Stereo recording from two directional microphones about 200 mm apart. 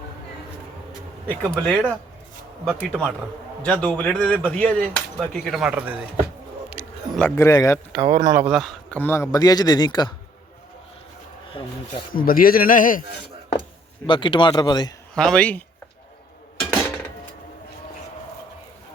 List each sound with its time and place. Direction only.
1.3 s speech: 5° left (ahead or behind)
7.2 s speech: 10° left (ahead or behind)
8.2 s speech: 15° right (ahead or behind)
8.4 s a man's voice: centre (ahead or behind); by 10.2 s 20° left (ahead or behind)
11.6 s a man's voice: 25° left (ahead or behind)
12.1 s a man's voice: 45° left (ahead or behind)
14.1 s a man's voice: 25° left (ahead or behind)
15.1 s speech: 5° left (ahead or behind)